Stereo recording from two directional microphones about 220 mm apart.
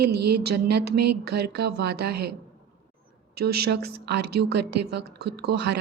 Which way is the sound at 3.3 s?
45° right (ahead or behind).